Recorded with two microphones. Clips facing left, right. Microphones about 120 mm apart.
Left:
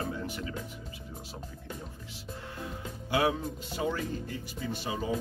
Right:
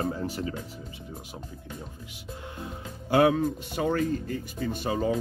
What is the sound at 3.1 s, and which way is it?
Speech, 60° right (ahead or behind).